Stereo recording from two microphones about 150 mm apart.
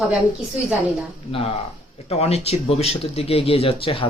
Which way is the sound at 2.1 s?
45° left (ahead or behind).